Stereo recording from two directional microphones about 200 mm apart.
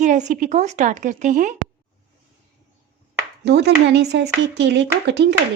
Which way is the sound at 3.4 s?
55° right (ahead or behind).